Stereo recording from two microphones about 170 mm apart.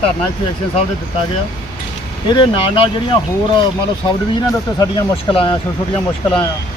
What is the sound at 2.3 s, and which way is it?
Speech, 30° left (ahead or behind).